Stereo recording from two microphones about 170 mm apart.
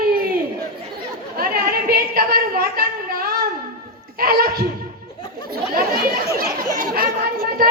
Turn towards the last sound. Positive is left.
turn(degrees=-60)  # may be behind; listen again after turning